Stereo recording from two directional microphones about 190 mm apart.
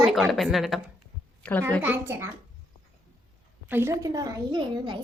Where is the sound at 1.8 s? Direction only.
10° right (ahead or behind).